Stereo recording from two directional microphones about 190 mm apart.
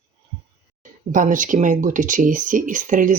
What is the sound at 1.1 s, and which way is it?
Speech, 45° right (ahead or behind).